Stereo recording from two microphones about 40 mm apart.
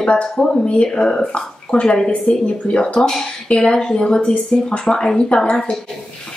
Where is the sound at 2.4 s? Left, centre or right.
Left.